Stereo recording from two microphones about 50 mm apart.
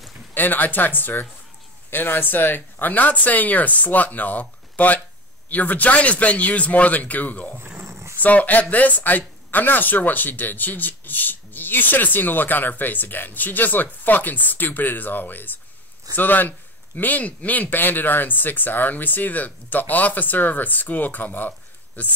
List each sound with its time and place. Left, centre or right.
0.3 s speech: left
7.8 s dog: right
8.2 s speech: left